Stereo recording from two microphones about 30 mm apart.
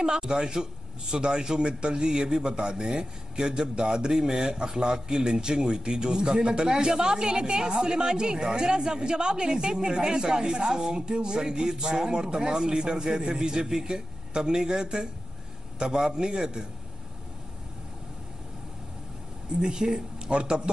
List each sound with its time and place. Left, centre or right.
0.0 s a man's voice: right
19.6 s a man's voice: right